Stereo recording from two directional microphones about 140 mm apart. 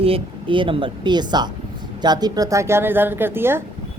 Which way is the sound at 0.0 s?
40° right (ahead or behind).